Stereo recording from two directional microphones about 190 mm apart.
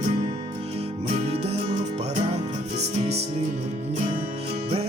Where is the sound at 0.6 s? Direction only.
35° right (ahead or behind).